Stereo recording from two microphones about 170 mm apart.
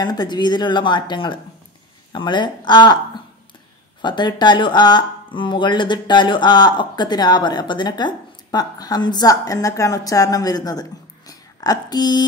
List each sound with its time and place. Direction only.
0.0 s speech: 25° left (ahead or behind)
4.0 s speech: 25° left (ahead or behind)